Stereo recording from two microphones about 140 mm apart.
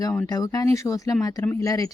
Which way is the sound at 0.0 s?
25° left (ahead or behind).